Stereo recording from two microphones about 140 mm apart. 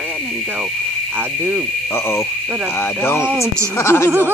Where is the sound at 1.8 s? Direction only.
15° left (ahead or behind).